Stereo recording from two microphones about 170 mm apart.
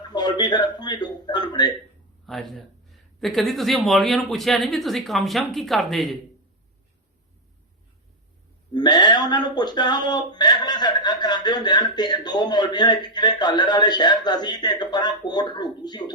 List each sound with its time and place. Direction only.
0.1 s speech: 25° left (ahead or behind)
2.2 s speech: centre (ahead or behind)
8.7 s speech: 25° left (ahead or behind)